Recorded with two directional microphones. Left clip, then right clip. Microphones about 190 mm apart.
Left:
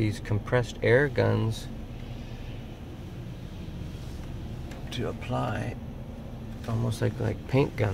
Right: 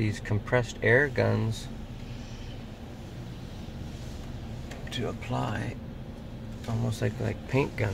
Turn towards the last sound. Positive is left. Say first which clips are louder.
# left 2 dB
turn(degrees=10)  # may be behind; listen again after turning